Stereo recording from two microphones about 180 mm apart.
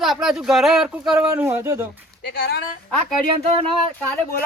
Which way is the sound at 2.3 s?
60° left (ahead or behind).